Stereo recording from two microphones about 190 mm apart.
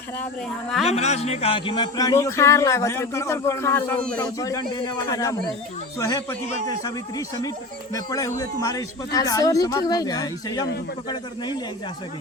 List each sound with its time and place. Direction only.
0.9 s a man's voice: 35° left (ahead or behind)